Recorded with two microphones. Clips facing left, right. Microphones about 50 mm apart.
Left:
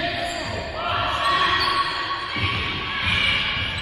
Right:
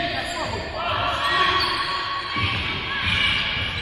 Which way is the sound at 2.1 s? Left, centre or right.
Centre.